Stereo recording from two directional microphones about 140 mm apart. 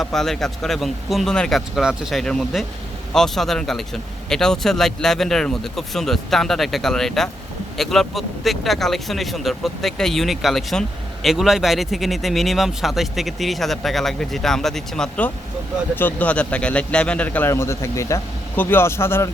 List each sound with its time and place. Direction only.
0.0 s speech: 5° left (ahead or behind)